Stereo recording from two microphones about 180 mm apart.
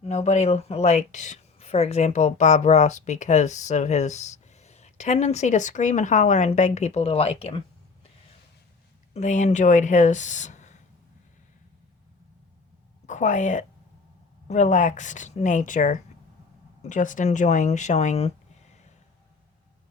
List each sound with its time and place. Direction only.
0.0 s speech: 40° left (ahead or behind)
9.1 s speech: 40° left (ahead or behind)
13.1 s a woman's voice: 40° left (ahead or behind)